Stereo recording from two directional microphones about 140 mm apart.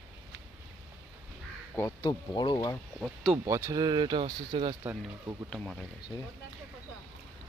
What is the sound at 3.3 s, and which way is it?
Speech, 15° right (ahead or behind).